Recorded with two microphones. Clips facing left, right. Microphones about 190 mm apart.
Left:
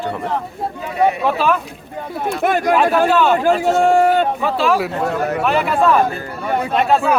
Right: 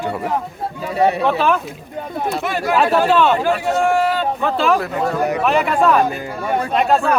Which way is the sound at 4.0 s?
50° left (ahead or behind).